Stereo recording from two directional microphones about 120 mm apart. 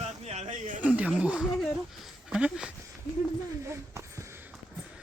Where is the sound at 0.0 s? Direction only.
65° right (ahead or behind).